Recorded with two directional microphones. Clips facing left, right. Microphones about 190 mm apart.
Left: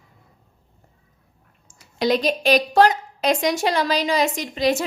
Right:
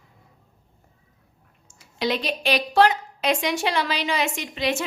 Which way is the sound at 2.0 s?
40° left (ahead or behind).